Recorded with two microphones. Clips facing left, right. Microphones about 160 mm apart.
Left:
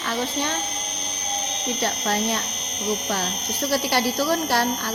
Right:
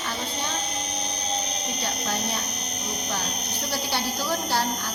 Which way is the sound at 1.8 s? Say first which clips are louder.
Left 6 dB; 80° left.